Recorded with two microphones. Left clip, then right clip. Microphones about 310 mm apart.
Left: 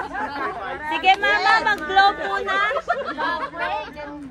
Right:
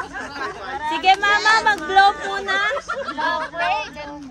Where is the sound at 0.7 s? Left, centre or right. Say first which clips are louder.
Right 2 dB; right.